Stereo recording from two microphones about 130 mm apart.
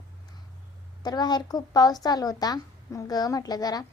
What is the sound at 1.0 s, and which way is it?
A woman's voice, 30° left (ahead or behind).